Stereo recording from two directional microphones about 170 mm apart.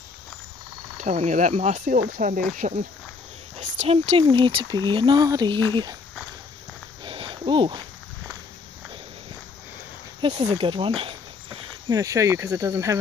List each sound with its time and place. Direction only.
0.9 s speech: 45° right (ahead or behind)
2.0 s speech: 55° right (ahead or behind); by 5.9 s 25° right (ahead or behind)
7.1 s a sound: 30° right (ahead or behind)
10.3 s snake: 35° right (ahead or behind)
12.0 s speech: 20° right (ahead or behind)